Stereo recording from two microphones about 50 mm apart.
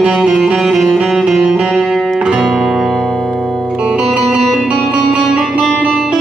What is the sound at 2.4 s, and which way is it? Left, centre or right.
Music, centre.